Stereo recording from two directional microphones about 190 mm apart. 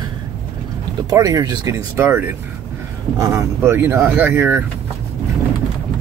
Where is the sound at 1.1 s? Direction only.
20° right (ahead or behind).